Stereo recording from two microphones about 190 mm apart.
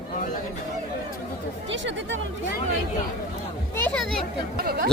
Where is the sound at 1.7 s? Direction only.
75° right (ahead or behind).